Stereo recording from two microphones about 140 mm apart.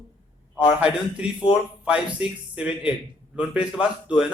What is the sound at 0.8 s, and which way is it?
Speech, 5° right (ahead or behind).